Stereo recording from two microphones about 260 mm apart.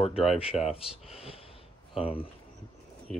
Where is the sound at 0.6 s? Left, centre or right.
Left.